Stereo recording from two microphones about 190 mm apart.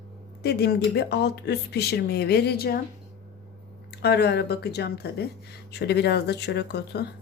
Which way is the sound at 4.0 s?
60° left (ahead or behind).